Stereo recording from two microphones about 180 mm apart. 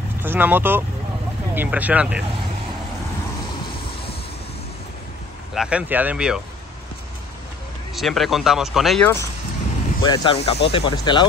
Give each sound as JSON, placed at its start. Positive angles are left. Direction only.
{"t": 0.2, "sound": "speech", "side_deg": -10}
{"t": 5.5, "sound": "speech", "side_deg": -5}
{"t": 7.9, "sound": "speech", "side_deg": 0}
{"t": 9.0, "sound": "speech", "side_deg": 15}
{"t": 10.0, "sound": "speech", "side_deg": 25}